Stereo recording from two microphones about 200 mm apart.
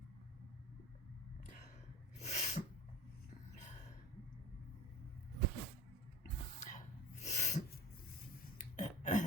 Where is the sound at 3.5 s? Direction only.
35° left (ahead or behind).